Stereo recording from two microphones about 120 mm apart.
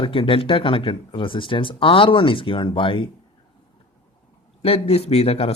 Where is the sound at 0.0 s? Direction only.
45° left (ahead or behind).